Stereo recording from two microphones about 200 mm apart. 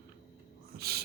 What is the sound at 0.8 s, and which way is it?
Speech, 50° right (ahead or behind).